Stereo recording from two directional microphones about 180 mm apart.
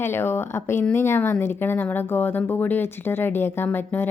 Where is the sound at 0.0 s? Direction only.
10° left (ahead or behind).